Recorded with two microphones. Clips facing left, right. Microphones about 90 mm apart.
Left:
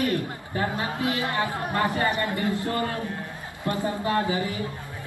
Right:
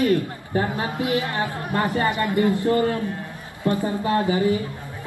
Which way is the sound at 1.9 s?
20° right (ahead or behind).